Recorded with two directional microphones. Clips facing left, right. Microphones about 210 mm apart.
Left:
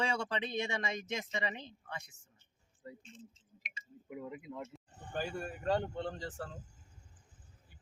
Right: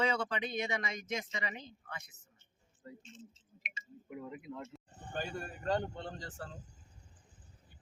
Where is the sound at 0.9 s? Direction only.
30° left (ahead or behind).